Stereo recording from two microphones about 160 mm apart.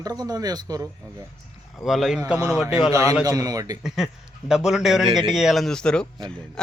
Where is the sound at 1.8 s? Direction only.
Centre (ahead or behind).